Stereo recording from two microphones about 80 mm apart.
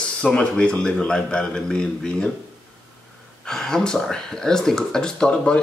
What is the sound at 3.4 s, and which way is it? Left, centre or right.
Speech, centre.